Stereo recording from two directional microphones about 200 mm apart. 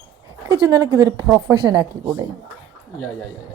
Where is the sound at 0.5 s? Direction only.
15° right (ahead or behind).